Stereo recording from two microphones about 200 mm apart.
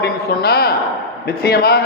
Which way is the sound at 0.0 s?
50° left (ahead or behind).